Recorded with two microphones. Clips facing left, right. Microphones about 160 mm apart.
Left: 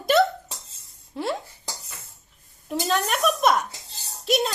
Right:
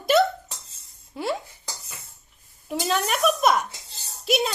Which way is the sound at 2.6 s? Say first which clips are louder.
Even; centre (ahead or behind).